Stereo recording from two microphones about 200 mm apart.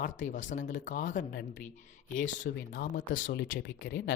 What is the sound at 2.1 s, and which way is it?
Speech, 40° left (ahead or behind).